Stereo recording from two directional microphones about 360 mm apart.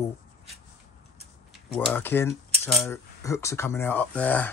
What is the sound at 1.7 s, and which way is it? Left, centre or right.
Speech, centre.